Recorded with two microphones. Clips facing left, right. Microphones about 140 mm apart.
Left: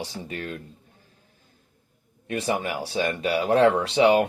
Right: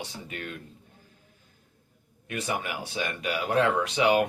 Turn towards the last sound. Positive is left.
turn(degrees=30)  # may be behind; listen again after turning